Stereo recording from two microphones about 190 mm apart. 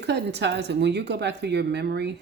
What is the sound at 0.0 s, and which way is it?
Speech, 60° right (ahead or behind).